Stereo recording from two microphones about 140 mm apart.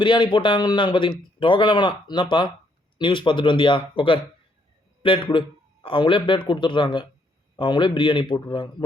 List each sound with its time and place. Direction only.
0.0 s a man's voice: 35° left (ahead or behind)